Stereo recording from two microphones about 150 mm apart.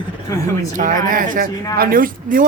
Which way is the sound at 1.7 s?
70° right (ahead or behind).